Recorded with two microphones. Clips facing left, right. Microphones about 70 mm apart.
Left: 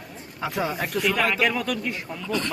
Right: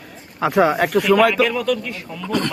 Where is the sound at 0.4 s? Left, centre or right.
Right.